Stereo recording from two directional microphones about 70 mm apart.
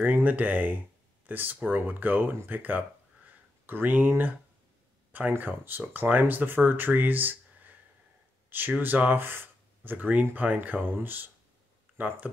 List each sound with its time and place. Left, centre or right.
0.0 s speech: right
5.4 s speech: right